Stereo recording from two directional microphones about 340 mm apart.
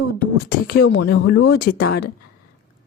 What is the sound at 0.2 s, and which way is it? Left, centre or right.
Speech, left.